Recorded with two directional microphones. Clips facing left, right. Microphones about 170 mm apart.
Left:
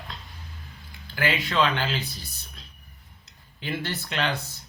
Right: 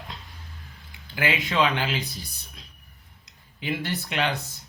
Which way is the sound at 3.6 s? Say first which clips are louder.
Right 2 dB; 15° right (ahead or behind).